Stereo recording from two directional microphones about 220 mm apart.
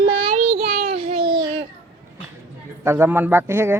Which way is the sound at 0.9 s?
25° right (ahead or behind).